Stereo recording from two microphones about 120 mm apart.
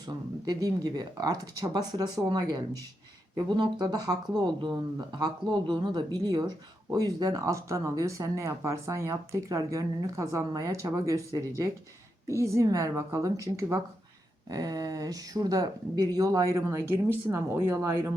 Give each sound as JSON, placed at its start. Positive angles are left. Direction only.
{"t": 0.4, "sound": "speech", "side_deg": -35}